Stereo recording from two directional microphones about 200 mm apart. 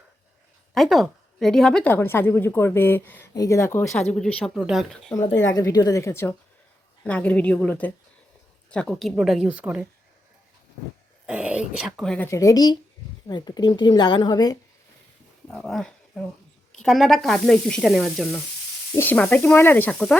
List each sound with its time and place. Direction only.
0.7 s a woman's voice: centre (ahead or behind)
4.4 s sizzle: centre (ahead or behind)
5.5 s a woman's voice: 15° left (ahead or behind)
8.7 s sizzle: 5° left (ahead or behind)
11.3 s sizzle: 5° right (ahead or behind); by 12.7 s 20° left (ahead or behind)
13.2 s a woman's voice: 20° left (ahead or behind)
15.4 s speech: centre (ahead or behind)
16.7 s sizzle: centre (ahead or behind)
18.9 s a woman's voice: 10° left (ahead or behind)